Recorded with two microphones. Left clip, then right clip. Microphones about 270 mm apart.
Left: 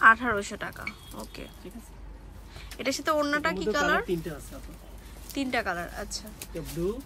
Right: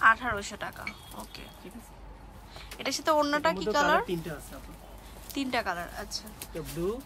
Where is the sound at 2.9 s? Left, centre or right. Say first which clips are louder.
Even; centre.